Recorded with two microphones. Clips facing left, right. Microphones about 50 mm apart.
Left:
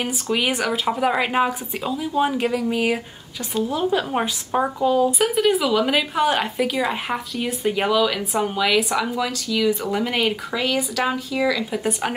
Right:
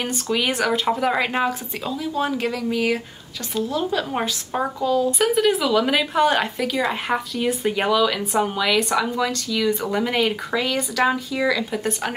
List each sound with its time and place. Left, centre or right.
0.0 s speech: centre
4.8 s speech: centre
5.2 s speech: centre